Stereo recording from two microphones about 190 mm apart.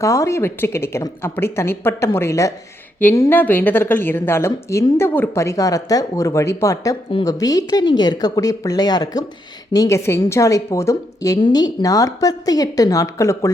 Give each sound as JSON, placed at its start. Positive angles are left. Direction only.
{"t": 0.0, "sound": "a woman's voice", "side_deg": 15}